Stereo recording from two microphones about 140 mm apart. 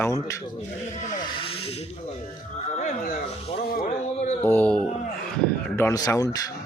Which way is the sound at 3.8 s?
55° left (ahead or behind).